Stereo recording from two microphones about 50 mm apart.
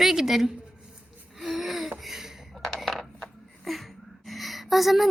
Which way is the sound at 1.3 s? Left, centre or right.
Centre.